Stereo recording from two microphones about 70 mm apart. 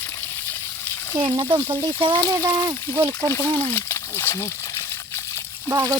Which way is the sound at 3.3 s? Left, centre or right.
Left.